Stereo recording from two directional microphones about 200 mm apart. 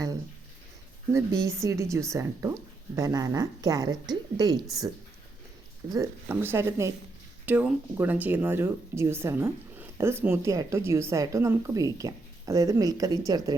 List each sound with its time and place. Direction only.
1.1 s a woman's voice: 15° right (ahead or behind)
5.9 s speech: 15° right (ahead or behind)